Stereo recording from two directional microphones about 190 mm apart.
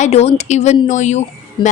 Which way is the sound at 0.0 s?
35° left (ahead or behind).